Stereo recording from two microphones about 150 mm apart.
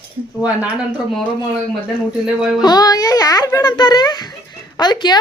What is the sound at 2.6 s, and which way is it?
A child's voice, 25° left (ahead or behind).